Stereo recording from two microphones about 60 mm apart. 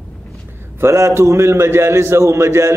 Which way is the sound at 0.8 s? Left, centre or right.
Right.